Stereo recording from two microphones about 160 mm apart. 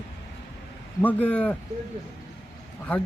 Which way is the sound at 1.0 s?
10° left (ahead or behind).